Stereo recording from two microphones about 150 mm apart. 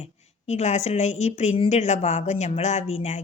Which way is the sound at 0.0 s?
45° left (ahead or behind).